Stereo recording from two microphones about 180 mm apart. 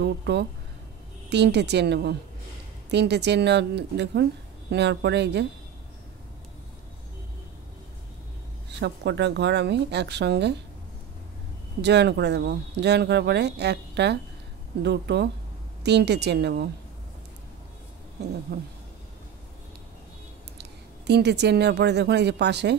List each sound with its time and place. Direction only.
0.0 s speech: 70° right (ahead or behind)
8.7 s speech: 70° right (ahead or behind)
11.8 s speech: 70° right (ahead or behind)
18.5 s a sound: 60° right (ahead or behind)
21.1 s speech: 65° right (ahead or behind)